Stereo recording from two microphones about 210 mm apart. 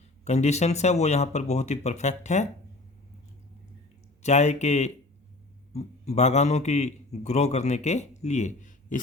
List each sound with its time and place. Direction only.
0.3 s a man's voice: 30° left (ahead or behind)
4.2 s a man's voice: 30° left (ahead or behind)